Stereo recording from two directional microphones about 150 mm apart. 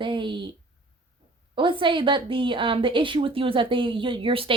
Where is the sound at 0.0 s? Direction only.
35° right (ahead or behind).